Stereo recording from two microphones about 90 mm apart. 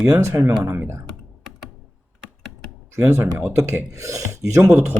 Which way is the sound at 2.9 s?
25° right (ahead or behind).